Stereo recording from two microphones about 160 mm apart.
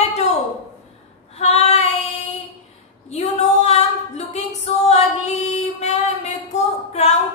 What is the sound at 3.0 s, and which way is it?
Female singing, 45° left (ahead or behind).